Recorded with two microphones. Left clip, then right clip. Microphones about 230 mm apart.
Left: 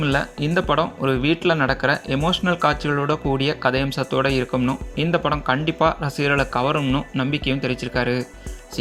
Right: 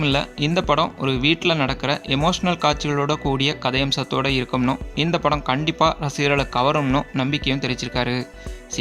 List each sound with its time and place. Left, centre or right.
0.0 s speech: centre